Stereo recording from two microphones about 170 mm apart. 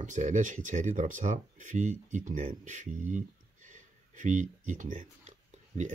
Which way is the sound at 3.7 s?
45° right (ahead or behind).